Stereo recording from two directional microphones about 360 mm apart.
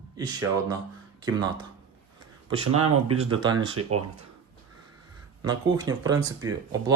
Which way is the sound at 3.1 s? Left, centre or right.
Centre.